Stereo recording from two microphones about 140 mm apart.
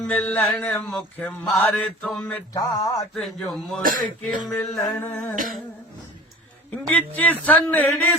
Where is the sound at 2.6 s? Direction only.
25° left (ahead or behind).